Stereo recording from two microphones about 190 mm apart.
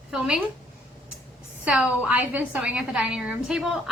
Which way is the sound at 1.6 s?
5° right (ahead or behind).